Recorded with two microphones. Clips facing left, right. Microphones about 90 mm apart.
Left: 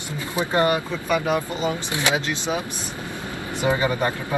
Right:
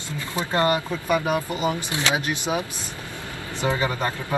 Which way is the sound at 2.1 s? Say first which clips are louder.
Even; 20° right (ahead or behind).